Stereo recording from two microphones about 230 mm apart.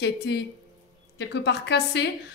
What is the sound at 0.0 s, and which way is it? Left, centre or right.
A woman's voice, left.